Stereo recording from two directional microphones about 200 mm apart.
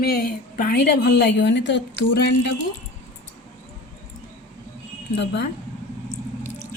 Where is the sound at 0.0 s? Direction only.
50° left (ahead or behind).